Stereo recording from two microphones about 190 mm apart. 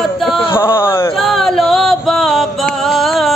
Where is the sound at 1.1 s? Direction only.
Centre (ahead or behind).